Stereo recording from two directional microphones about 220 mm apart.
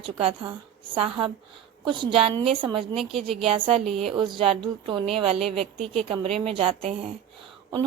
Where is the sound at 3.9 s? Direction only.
25° right (ahead or behind).